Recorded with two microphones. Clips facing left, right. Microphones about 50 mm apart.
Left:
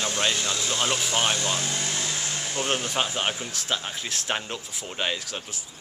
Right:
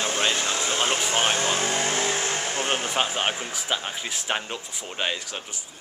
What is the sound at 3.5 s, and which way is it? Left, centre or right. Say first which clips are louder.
Speech: right 1 dB; centre.